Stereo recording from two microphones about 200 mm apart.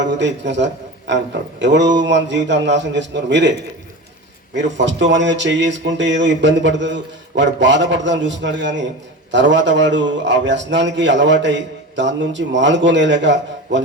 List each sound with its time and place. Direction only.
0.1 s a man's voice: 60° right (ahead or behind)
4.5 s a man's voice: 65° right (ahead or behind)